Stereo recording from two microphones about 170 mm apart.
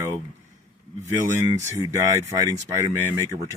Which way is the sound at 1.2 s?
15° right (ahead or behind).